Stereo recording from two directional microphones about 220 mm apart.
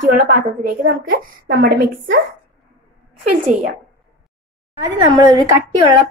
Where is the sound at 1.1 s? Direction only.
40° right (ahead or behind).